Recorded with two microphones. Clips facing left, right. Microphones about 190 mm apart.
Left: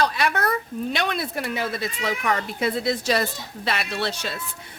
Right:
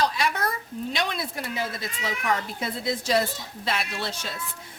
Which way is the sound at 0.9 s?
60° left (ahead or behind).